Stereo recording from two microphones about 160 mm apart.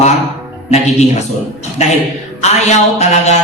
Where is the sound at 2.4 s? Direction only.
45° left (ahead or behind).